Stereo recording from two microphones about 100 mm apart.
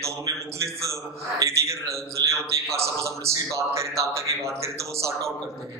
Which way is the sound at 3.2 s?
30° right (ahead or behind).